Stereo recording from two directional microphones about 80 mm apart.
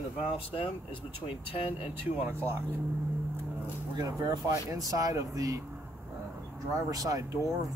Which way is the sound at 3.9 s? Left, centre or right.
Right.